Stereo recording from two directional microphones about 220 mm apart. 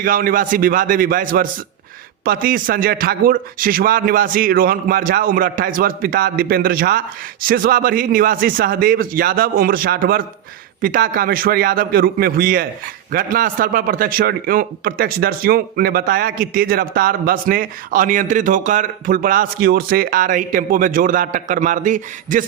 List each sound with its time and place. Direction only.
0.0 s a man's voice: 40° right (ahead or behind)